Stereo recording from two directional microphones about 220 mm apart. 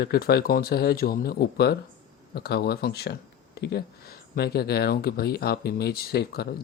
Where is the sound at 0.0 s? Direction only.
45° left (ahead or behind).